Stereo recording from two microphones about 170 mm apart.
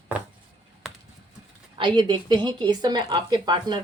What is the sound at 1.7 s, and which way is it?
Speech, 30° right (ahead or behind).